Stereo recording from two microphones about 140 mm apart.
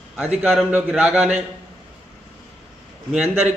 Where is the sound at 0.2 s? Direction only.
5° right (ahead or behind).